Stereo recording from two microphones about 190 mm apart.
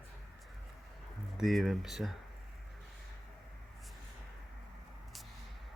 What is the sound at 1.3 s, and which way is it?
Speech, centre (ahead or behind).